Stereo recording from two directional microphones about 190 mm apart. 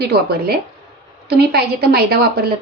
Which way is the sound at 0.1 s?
55° right (ahead or behind).